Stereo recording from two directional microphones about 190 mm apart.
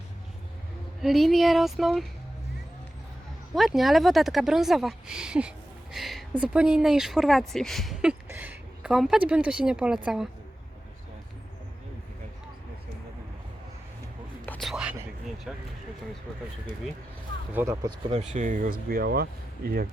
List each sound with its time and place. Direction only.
1.0 s speech: centre (ahead or behind)
3.5 s a woman's voice: centre (ahead or behind)
14.4 s whispering: 10° left (ahead or behind)
14.7 s whispering: 5° right (ahead or behind)
15.5 s speech: centre (ahead or behind)
17.5 s speech: 10° right (ahead or behind)
18.1 s speech: 40° right (ahead or behind)